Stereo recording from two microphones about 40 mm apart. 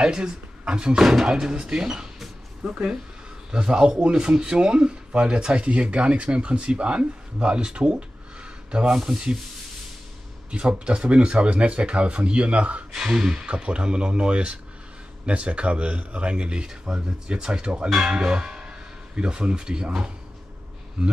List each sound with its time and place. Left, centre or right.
0.0 s speech: centre
1.9 s a sound: centre
2.7 s speech: right
10.6 s speech: right
13.0 s speech: centre